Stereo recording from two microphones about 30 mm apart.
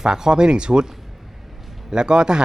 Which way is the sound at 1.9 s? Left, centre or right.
Right.